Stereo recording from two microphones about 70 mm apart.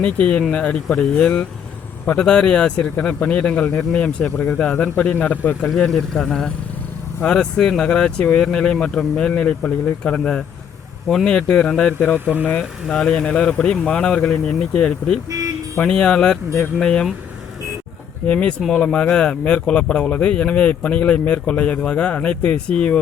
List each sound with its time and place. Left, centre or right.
0.0 s speech: centre
5.7 s speech: centre
11.9 s speech: left
12.2 s speech: right
12.9 s speech: centre
15.3 s speech: right
15.8 s speech: centre
18.3 s speech: centre